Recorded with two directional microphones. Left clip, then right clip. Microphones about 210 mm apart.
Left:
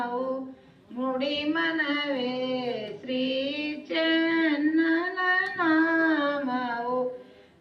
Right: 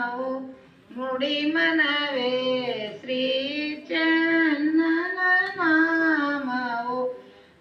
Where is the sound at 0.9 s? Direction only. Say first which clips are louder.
Right 2 dB; 35° right (ahead or behind).